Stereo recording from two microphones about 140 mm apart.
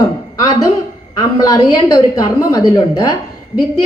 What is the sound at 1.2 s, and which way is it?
A woman's voice, 25° left (ahead or behind).